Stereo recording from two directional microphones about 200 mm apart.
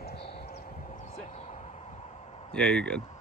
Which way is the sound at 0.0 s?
50° left (ahead or behind).